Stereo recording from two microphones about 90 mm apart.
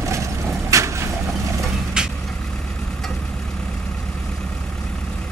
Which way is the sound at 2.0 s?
10° right (ahead or behind).